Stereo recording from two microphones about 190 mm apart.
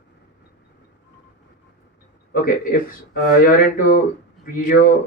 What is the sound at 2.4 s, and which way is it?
Speech, 45° left (ahead or behind).